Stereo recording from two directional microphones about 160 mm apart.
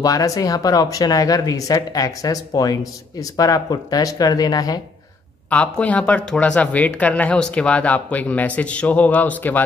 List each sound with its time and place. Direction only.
0.0 s speech: 20° left (ahead or behind)
5.5 s speech: 10° left (ahead or behind)